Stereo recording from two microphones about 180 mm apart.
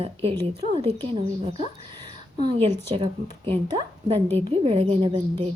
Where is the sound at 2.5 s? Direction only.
30° right (ahead or behind).